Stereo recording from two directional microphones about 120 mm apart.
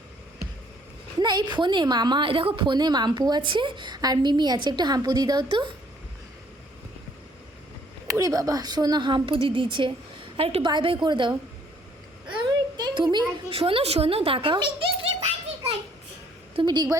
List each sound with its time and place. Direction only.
1.2 s a woman's voice: 35° right (ahead or behind)
8.0 s a woman's voice: 25° right (ahead or behind)
12.4 s a sound: 40° right (ahead or behind)
13.6 s a woman's voice: 50° right (ahead or behind)
16.6 s a woman's voice: 35° right (ahead or behind)